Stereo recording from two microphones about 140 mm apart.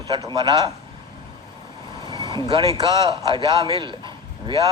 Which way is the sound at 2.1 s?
30° right (ahead or behind).